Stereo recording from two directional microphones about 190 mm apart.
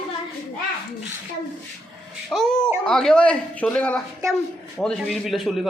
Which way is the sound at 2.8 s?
5° left (ahead or behind).